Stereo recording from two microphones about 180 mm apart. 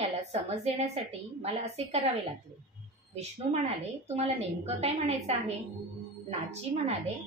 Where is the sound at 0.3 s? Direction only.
35° right (ahead or behind).